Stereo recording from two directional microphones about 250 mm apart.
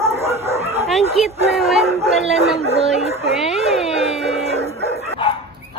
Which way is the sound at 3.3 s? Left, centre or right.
Left.